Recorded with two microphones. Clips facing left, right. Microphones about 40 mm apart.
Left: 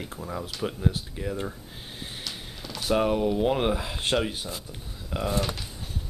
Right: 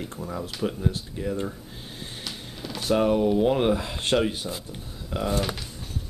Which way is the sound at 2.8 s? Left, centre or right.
Centre.